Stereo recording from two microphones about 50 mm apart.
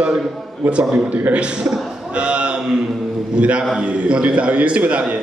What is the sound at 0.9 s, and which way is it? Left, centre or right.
A man's voice, right.